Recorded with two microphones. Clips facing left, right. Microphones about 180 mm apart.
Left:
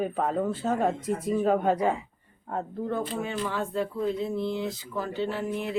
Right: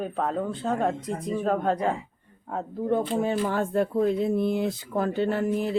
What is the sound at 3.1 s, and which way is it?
Speech, 50° right (ahead or behind).